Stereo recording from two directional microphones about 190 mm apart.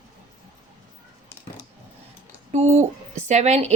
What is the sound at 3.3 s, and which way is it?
Speech, 35° right (ahead or behind).